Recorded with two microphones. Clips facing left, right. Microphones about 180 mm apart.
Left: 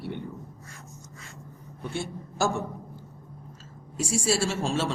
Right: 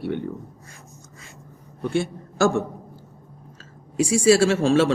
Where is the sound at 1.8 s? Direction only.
70° right (ahead or behind).